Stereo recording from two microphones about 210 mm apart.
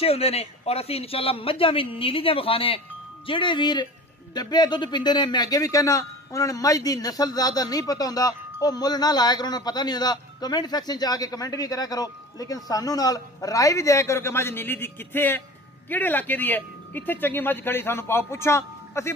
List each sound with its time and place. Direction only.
0.0 s a man's voice: 30° left (ahead or behind); by 19.1 s 10° left (ahead or behind)